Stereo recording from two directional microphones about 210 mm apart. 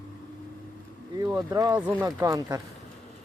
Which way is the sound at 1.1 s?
15° right (ahead or behind).